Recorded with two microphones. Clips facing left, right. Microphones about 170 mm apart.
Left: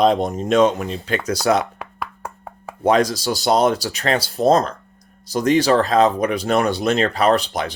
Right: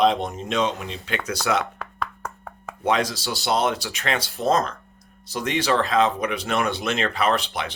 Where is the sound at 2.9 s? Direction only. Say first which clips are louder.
Left 6 dB; 40° left (ahead or behind).